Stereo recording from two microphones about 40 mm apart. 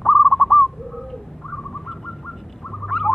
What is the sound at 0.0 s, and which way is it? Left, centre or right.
Bird, centre.